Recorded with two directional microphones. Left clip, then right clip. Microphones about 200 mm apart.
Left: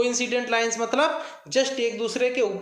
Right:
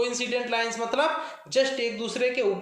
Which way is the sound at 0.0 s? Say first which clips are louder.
Left 3 dB; 30° left (ahead or behind).